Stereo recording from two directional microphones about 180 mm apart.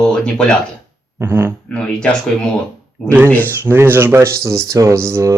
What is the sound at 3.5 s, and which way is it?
Speech, 15° right (ahead or behind).